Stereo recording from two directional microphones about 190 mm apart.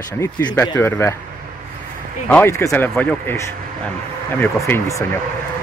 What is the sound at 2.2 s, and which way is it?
Speech, 10° left (ahead or behind).